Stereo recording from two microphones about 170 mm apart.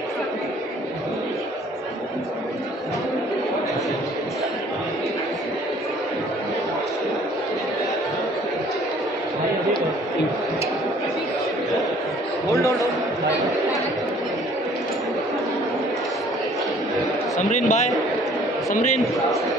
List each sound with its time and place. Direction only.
12.4 s a man's voice: 20° left (ahead or behind)
17.5 s a man's voice: 45° left (ahead or behind)